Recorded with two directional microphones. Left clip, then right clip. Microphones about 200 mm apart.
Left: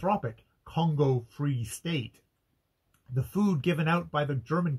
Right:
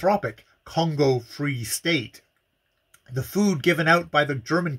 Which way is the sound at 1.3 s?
20° right (ahead or behind).